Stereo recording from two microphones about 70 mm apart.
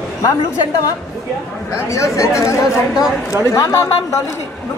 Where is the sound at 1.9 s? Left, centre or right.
Left.